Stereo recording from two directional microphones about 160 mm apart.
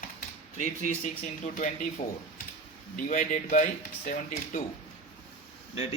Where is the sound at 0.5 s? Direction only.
50° left (ahead or behind).